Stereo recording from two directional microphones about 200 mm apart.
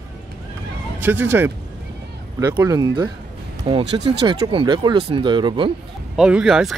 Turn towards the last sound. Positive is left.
turn(degrees=-5)  # may be behind; listen again after turning